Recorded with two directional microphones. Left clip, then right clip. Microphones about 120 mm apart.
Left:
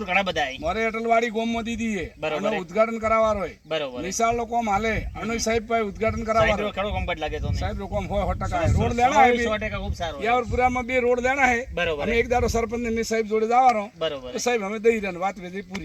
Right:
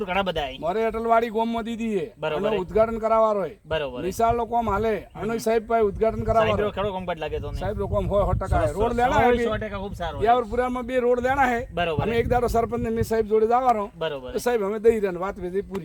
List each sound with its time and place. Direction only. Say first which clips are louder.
0.1 s a man's voice: left 5 dB; 50° right (ahead or behind)